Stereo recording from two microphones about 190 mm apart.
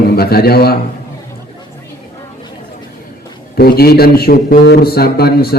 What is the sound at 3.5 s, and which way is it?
A man's voice, 55° left (ahead or behind).